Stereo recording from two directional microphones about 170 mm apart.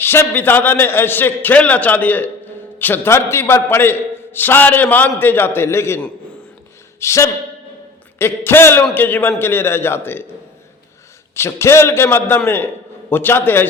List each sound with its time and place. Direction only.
0.0 s a man's voice: 15° left (ahead or behind)
11.3 s a man's voice: 15° left (ahead or behind)